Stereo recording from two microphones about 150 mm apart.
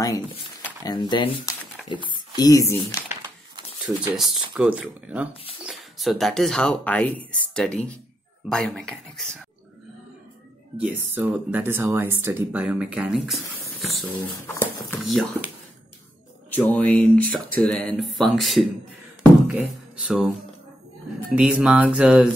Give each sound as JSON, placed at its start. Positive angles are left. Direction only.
{"t": 0.8, "sound": "speech", "side_deg": 30}
{"t": 3.1, "sound": "a sound", "side_deg": -25}
{"t": 3.8, "sound": "speech", "side_deg": -5}
{"t": 10.8, "sound": "speech", "side_deg": -10}
{"t": 14.4, "sound": "speech", "side_deg": 15}
{"t": 15.0, "sound": "speech", "side_deg": 0}
{"t": 16.4, "sound": "speech", "side_deg": 10}
{"t": 21.3, "sound": "speech", "side_deg": -5}